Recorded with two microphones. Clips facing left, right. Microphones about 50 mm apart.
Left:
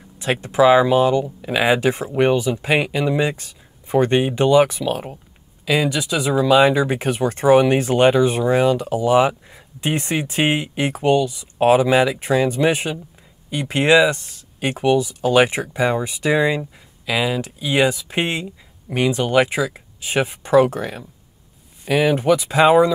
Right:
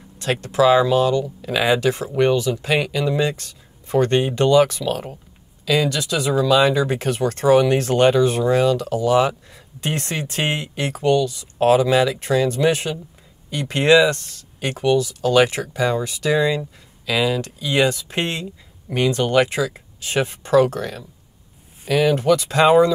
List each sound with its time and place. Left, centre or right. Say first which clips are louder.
0.2 s speech: left 2 dB; centre